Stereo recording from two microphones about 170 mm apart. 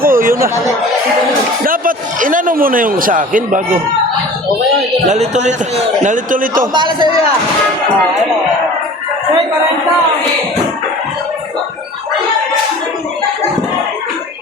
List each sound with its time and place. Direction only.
0.0 s chatter: 55° right (ahead or behind)
1.6 s a man's voice: 55° right (ahead or behind)
5.0 s a man's voice: 45° right (ahead or behind)
6.7 s a man's voice: 25° right (ahead or behind)